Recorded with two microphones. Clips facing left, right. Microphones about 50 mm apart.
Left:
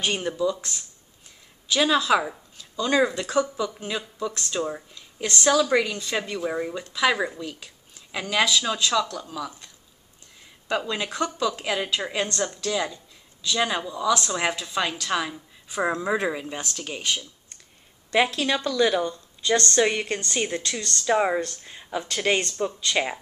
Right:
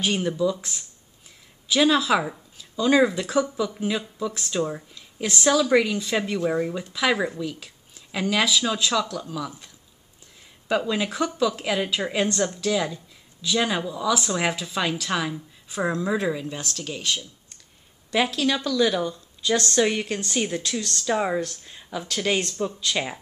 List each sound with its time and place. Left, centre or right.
0.0 s speech: centre
10.7 s speech: centre
15.8 s speech: centre
18.3 s speech: centre
18.9 s speech: centre
19.8 s speech: centre
20.1 s speech: centre